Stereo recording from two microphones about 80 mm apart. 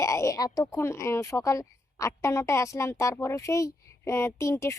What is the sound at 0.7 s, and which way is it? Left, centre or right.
A woman's voice, left.